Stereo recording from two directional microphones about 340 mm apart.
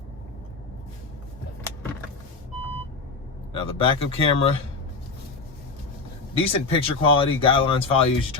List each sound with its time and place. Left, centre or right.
3.5 s speech: centre
6.3 s speech: centre